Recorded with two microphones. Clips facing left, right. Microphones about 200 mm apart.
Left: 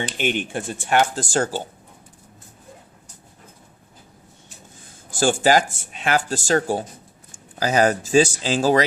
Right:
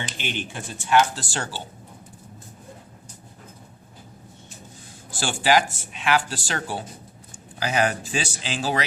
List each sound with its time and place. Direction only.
0.2 s speech: 50° left (ahead or behind)
5.1 s speech: 45° left (ahead or behind)